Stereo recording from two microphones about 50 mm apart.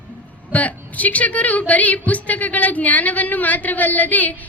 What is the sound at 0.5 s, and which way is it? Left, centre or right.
A woman's voice, left.